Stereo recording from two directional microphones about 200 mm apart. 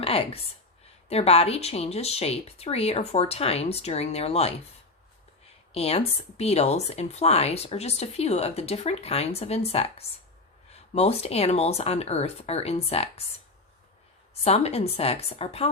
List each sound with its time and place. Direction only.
0.0 s a woman's voice: 30° left (ahead or behind)
5.7 s speech: 30° left (ahead or behind)
10.9 s speech: 30° left (ahead or behind)
14.4 s speech: 30° left (ahead or behind)